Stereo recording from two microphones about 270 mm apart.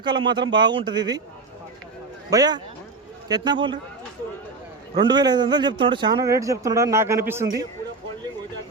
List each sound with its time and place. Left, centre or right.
0.0 s a man's voice: centre
2.3 s a man's voice: centre
4.9 s a man's voice: centre